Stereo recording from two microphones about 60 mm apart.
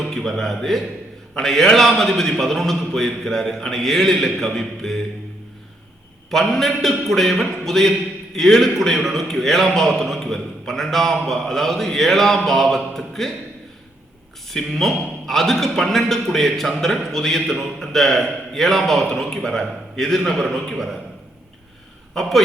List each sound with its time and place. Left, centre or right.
0.0 s a man's voice: centre
6.5 s a man's voice: centre
14.5 s a man's voice: centre
22.1 s a man's voice: centre